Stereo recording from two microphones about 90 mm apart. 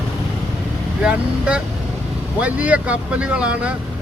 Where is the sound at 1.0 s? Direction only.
10° right (ahead or behind).